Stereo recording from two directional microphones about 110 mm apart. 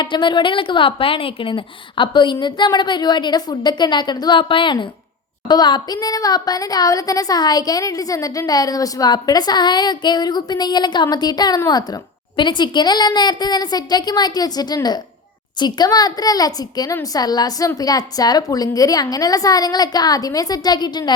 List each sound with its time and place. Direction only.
0.0 s a woman's voice: 45° left (ahead or behind)